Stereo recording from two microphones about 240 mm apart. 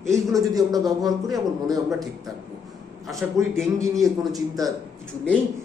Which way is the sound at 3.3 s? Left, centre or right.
Centre.